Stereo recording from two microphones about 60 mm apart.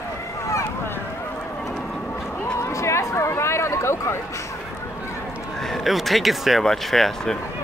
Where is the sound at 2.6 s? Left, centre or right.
Left.